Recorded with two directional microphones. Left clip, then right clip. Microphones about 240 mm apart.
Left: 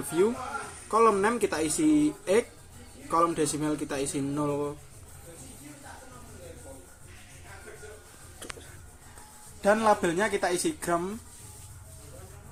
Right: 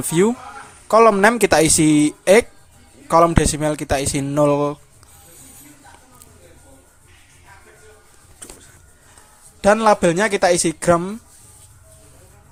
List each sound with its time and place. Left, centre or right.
0.9 s speech: right
9.6 s a man's voice: right